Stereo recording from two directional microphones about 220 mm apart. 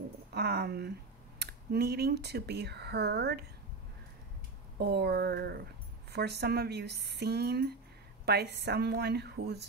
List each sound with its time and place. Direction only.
0.3 s speech: 50° right (ahead or behind)
4.7 s speech: 45° right (ahead or behind)